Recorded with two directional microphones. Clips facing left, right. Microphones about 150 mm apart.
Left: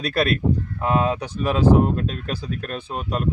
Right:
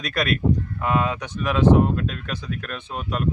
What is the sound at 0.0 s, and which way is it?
Speech, 30° left (ahead or behind).